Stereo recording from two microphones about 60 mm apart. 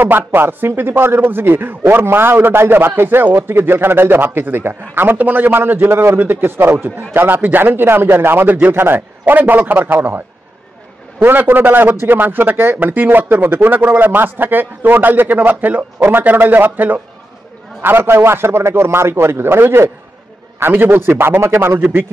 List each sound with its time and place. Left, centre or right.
0.0 s a man's voice: right
11.2 s a man's voice: right